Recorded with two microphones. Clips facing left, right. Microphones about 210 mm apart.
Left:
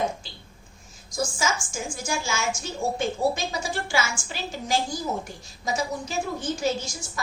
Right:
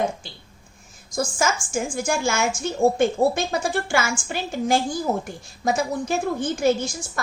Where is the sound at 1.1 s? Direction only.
55° right (ahead or behind).